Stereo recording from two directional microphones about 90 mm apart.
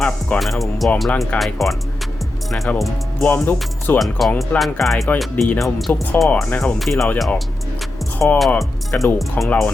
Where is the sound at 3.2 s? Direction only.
20° left (ahead or behind).